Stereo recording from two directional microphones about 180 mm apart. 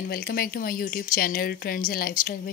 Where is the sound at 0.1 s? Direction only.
55° left (ahead or behind).